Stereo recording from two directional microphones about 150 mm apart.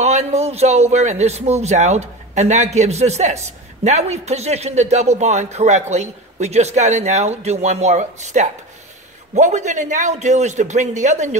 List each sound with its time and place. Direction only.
0.0 s a man's voice: 45° right (ahead or behind)